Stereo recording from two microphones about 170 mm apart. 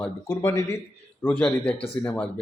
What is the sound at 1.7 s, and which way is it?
Speech, 35° left (ahead or behind).